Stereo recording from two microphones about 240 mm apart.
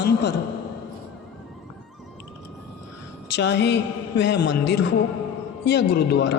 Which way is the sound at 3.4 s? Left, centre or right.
Left.